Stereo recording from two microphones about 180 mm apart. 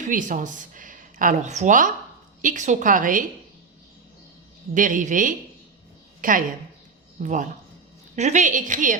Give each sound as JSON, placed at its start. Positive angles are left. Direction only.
{"t": 0.0, "sound": "speech", "side_deg": -45}
{"t": 4.7, "sound": "speech", "side_deg": -45}